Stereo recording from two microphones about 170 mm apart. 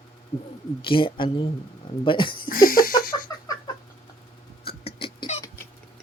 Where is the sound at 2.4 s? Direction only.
55° left (ahead or behind).